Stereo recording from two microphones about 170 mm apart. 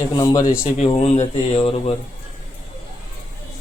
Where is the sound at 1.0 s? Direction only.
40° left (ahead or behind).